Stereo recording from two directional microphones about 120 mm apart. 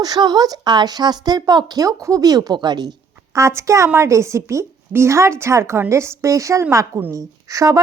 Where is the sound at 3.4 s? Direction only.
25° right (ahead or behind).